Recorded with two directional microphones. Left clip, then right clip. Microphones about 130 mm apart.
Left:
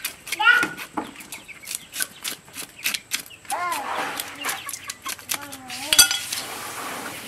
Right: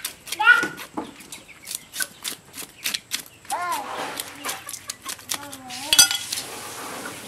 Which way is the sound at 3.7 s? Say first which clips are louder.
Left 2 dB; centre (ahead or behind).